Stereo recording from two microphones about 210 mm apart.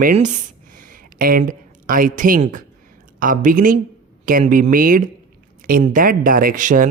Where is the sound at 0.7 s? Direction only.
40° right (ahead or behind).